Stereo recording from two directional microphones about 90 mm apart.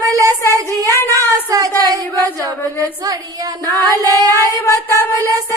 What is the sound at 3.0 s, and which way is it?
Female singing, 45° right (ahead or behind).